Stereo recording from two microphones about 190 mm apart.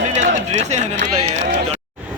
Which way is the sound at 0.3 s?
40° right (ahead or behind).